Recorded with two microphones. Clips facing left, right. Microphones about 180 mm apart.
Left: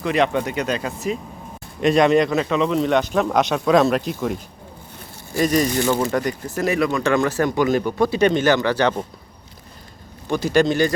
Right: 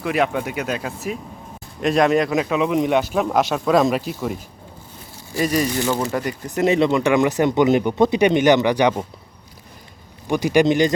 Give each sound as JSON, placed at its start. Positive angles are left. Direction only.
{"t": 0.0, "sound": "speech", "side_deg": -5}
{"t": 5.3, "sound": "speech", "side_deg": 45}
{"t": 5.8, "sound": "speech", "side_deg": -10}
{"t": 6.6, "sound": "speech", "side_deg": -25}
{"t": 10.2, "sound": "speech", "side_deg": -15}